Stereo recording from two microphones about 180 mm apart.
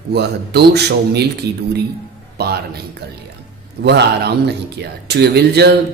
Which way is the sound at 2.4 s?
60° right (ahead or behind).